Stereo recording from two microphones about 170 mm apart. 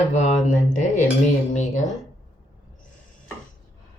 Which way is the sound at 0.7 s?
45° left (ahead or behind).